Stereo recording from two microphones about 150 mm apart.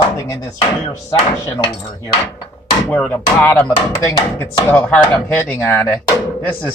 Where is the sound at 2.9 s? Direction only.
10° left (ahead or behind).